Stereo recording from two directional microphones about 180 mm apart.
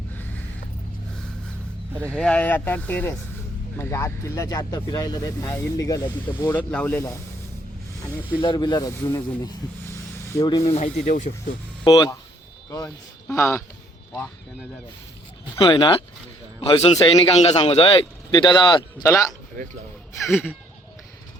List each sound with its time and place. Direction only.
2.0 s speech: 5° left (ahead or behind)
8.4 s speech: 25° left (ahead or behind)
10.6 s a man's voice: 35° left (ahead or behind)
11.9 s speech: 20° left (ahead or behind)
13.3 s speech: 15° left (ahead or behind)
15.5 s a man's voice: 25° left (ahead or behind)